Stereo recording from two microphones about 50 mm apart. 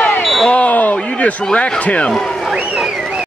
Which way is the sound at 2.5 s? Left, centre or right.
Right.